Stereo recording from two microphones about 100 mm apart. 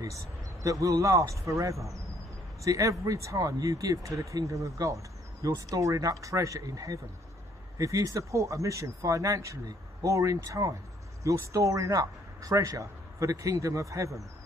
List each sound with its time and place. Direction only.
0.0 s speech: 35° right (ahead or behind)